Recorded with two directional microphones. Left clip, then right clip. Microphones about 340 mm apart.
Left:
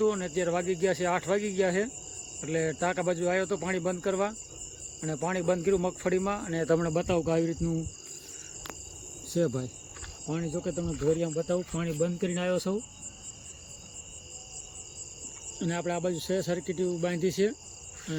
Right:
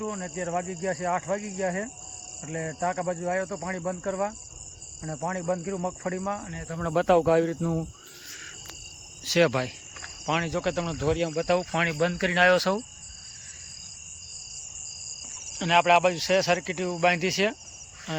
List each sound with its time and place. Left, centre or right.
0.0 s speech: centre
6.8 s speech: centre
9.3 s speech: centre
10.2 s speech: centre
15.8 s speech: right
16.1 s speech: centre